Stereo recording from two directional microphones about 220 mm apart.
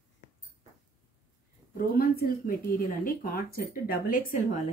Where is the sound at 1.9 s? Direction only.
40° left (ahead or behind).